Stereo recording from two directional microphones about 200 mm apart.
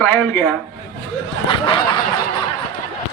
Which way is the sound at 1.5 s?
25° left (ahead or behind).